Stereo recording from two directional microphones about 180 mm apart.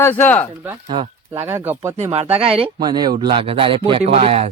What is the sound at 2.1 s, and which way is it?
Speech, 35° right (ahead or behind).